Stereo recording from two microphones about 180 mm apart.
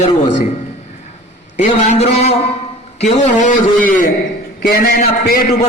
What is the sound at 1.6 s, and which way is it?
A man's voice, 40° left (ahead or behind).